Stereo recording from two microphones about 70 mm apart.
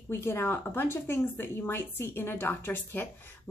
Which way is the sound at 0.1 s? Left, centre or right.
Left.